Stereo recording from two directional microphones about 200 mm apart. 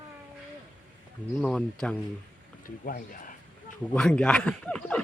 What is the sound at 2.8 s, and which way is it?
Speech, 45° left (ahead or behind).